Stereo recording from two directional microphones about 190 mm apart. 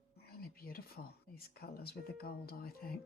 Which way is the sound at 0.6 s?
50° left (ahead or behind).